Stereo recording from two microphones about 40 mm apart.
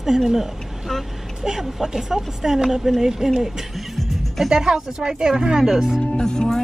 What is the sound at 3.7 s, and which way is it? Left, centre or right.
Music, centre.